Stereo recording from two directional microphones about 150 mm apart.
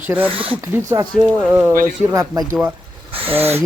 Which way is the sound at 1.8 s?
25° right (ahead or behind).